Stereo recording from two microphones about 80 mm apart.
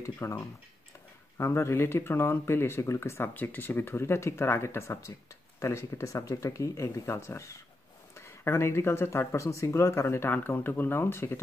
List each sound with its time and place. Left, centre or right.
0.0 s speech: left
1.4 s speech: left
10.3 s speech: left